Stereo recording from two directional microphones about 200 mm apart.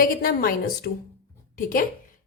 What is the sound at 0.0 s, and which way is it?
Speech, 45° left (ahead or behind).